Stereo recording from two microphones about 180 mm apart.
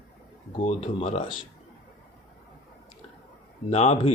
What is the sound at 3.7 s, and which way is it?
Speech, 40° left (ahead or behind).